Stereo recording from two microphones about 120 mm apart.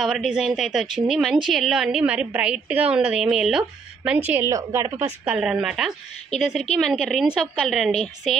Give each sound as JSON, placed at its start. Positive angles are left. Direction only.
{"t": 0.0, "sound": "a woman's voice", "side_deg": -5}
{"t": 4.5, "sound": "a woman's voice", "side_deg": -25}
{"t": 5.2, "sound": "a woman's voice", "side_deg": -10}